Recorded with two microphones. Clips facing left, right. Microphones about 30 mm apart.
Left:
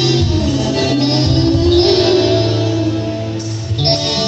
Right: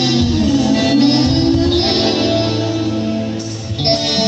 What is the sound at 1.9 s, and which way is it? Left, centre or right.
Music, centre.